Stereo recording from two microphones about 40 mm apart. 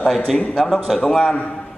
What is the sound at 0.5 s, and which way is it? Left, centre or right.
Speech, centre.